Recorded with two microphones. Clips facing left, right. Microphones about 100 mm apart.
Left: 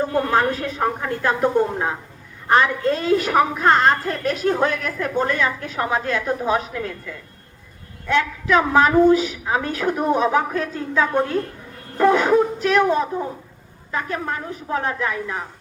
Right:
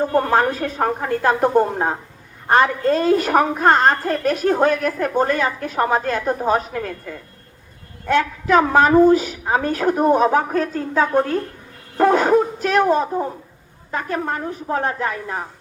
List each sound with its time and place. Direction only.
0.1 s a woman's voice: 35° right (ahead or behind)
11.9 s a sound: 40° right (ahead or behind)
13.9 s a woman's voice: 40° right (ahead or behind)